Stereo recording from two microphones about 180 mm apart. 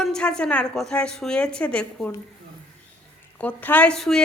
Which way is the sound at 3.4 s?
10° left (ahead or behind).